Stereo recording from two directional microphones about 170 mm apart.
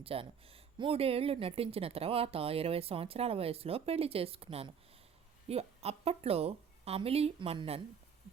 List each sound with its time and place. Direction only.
0.0 s speech: 35° right (ahead or behind)